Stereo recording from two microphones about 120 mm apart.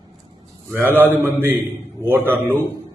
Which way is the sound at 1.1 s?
20° right (ahead or behind).